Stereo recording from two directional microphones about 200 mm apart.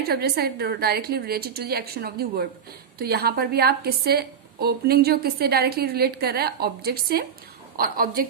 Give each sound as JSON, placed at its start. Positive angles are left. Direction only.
{"t": 0.1, "sound": "a woman's voice", "side_deg": -50}